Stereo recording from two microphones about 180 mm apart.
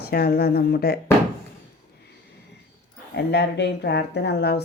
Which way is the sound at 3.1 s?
70° left (ahead or behind).